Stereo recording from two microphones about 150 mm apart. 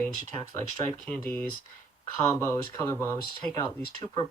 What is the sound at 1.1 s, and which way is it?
Speech, 15° left (ahead or behind).